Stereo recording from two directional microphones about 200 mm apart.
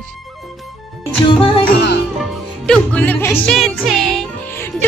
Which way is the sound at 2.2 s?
5° left (ahead or behind).